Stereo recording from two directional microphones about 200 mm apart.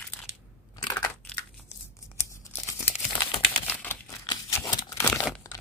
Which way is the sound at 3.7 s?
10° left (ahead or behind).